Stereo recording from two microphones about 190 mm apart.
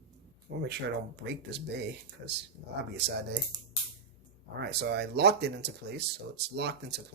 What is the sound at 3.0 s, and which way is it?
Speech, 60° right (ahead or behind).